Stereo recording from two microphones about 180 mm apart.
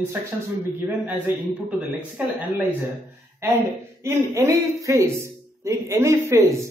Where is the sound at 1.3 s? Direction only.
10° right (ahead or behind).